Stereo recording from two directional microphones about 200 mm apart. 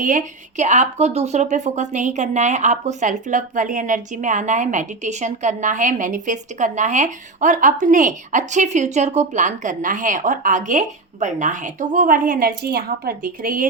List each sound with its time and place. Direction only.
0.0 s speech: 40° right (ahead or behind)